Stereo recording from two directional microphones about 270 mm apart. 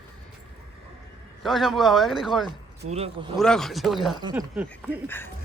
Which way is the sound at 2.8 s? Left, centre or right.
Right.